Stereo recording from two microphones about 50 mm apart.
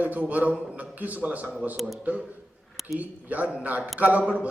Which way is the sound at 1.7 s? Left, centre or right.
Centre.